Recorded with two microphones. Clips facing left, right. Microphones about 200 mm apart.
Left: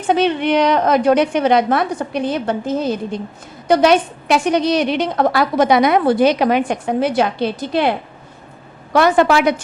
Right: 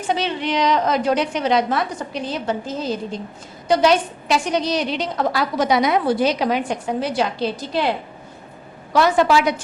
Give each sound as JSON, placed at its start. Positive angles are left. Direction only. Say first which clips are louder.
{"t": 0.1, "sound": "a woman's voice", "louder": "left 7 dB", "side_deg": 55}